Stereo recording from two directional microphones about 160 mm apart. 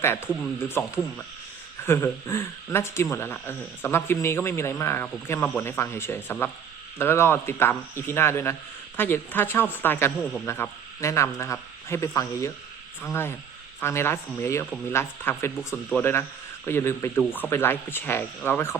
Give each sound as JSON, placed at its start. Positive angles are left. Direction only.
{"t": 0.0, "sound": "a man's voice", "side_deg": 15}